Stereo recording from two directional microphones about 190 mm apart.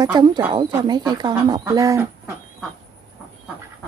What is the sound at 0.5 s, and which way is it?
Speech, 25° right (ahead or behind).